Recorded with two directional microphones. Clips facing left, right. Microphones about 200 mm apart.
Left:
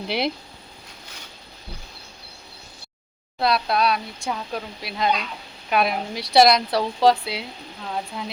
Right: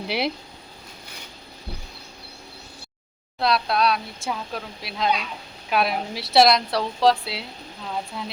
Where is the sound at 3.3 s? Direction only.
Centre (ahead or behind).